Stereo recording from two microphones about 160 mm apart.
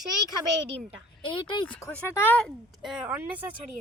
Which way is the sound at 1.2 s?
30° left (ahead or behind).